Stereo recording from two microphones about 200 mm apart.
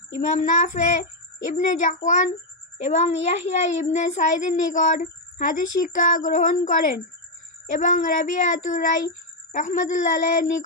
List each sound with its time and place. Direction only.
0.3 s a child's voice: 40° left (ahead or behind)